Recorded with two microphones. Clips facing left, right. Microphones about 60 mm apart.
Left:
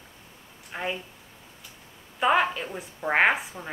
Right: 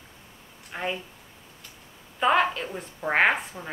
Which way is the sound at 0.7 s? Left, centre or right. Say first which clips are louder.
Right 1 dB; centre.